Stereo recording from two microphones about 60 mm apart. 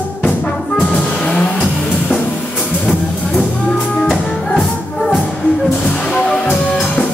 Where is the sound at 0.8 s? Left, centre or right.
Left.